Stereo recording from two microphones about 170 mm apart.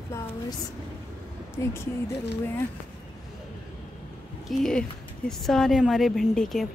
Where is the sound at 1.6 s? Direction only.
15° left (ahead or behind).